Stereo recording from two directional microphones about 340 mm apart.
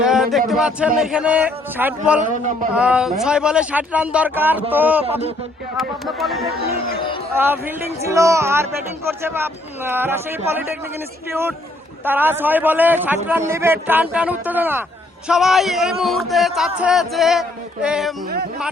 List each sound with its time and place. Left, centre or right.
0.0 s a man's voice: centre
2.3 s speech: right
2.7 s a man's voice: centre